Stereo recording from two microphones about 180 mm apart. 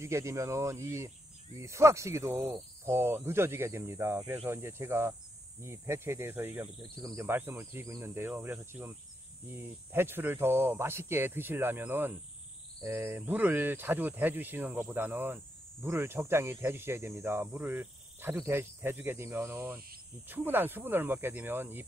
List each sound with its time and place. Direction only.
0.0 s speech: 15° right (ahead or behind)